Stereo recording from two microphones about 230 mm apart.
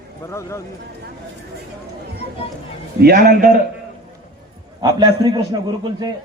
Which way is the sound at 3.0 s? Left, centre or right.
Right.